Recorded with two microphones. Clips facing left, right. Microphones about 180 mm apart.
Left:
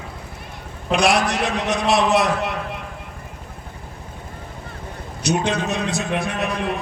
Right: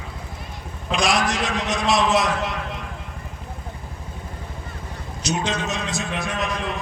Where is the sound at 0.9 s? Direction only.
60° left (ahead or behind).